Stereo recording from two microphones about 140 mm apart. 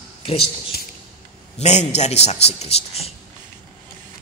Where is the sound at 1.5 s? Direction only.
55° left (ahead or behind).